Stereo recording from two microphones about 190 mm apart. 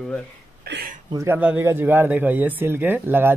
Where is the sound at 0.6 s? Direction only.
55° right (ahead or behind).